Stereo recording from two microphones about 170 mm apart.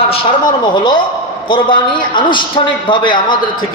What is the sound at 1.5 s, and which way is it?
A man's voice, 30° left (ahead or behind).